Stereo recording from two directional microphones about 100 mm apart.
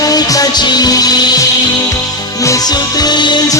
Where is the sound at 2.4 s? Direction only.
35° left (ahead or behind).